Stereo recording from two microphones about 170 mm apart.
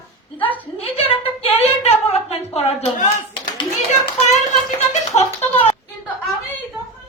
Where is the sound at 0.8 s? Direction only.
35° left (ahead or behind).